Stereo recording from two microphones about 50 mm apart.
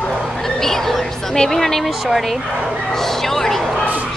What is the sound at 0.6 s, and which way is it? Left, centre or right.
Speech, centre.